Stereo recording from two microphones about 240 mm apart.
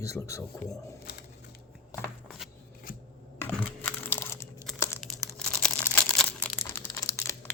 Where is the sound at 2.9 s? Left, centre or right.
Left.